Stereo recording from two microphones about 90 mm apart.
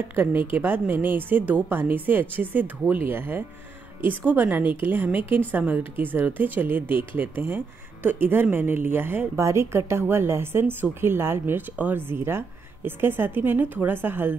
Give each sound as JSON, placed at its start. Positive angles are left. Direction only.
{"t": 0.1, "sound": "speech", "side_deg": -25}